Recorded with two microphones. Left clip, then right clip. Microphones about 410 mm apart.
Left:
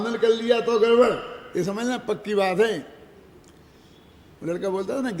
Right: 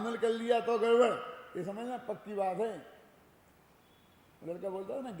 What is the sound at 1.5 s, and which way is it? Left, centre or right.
A man's voice, left.